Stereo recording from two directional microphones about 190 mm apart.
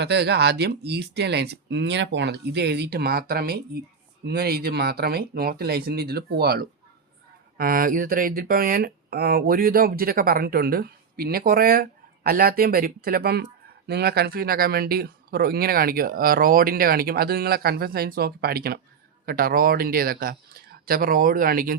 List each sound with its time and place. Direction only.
0.0 s speech: 60° right (ahead or behind)